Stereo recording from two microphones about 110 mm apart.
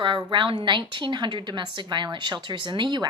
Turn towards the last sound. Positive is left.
turn(degrees=-45)  # may be behind; listen again after turning